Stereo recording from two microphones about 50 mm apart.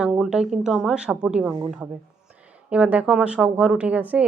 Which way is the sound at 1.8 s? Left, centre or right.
Right.